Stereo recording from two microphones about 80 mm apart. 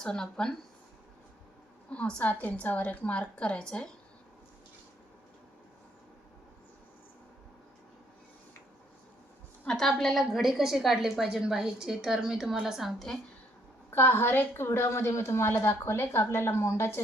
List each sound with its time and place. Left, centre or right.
0.0 s a woman's voice: centre
1.9 s a woman's voice: centre
9.6 s a woman's voice: centre
13.9 s a woman's voice: left